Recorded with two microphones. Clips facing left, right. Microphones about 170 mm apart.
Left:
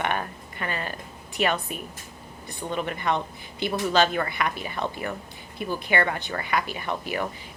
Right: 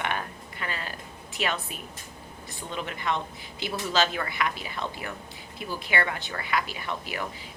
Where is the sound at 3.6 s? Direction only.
55° left (ahead or behind).